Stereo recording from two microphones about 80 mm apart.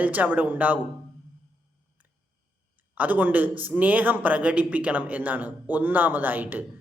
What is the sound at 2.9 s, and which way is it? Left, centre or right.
A man's voice, right.